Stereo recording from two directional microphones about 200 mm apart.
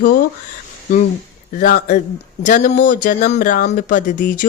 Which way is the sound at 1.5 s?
45° left (ahead or behind).